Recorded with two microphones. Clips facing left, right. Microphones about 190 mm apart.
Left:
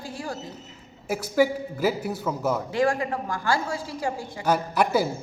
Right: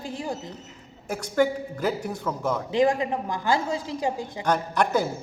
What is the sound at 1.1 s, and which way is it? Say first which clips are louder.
A man's voice: left 1 dB; 5° left (ahead or behind).